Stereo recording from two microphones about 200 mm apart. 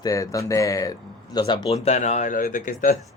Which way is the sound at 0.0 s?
15° left (ahead or behind).